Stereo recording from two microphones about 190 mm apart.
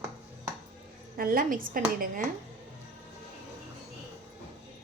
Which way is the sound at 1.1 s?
50° right (ahead or behind).